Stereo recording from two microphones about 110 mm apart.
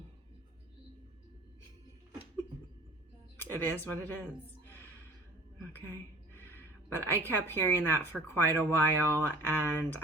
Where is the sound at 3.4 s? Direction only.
20° left (ahead or behind).